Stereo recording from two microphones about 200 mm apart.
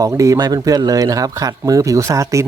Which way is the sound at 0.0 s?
15° right (ahead or behind).